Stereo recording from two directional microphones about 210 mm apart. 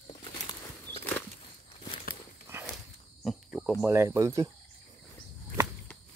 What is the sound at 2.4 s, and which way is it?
Walk, 10° right (ahead or behind).